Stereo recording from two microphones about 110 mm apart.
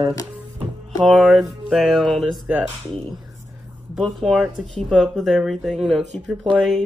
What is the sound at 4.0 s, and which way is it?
Speech, centre (ahead or behind).